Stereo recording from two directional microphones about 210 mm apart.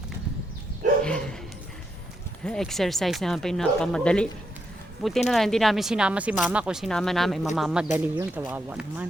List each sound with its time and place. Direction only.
1.0 s dog: 5° left (ahead or behind)
2.4 s speech: 5° left (ahead or behind)
5.3 s speech: centre (ahead or behind)